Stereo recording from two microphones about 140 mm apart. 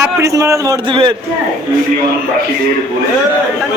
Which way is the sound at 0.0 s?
20° right (ahead or behind).